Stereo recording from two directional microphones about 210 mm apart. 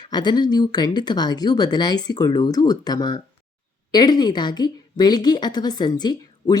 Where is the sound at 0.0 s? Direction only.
20° left (ahead or behind).